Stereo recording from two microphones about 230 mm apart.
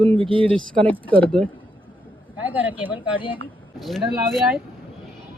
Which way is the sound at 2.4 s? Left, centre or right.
Centre.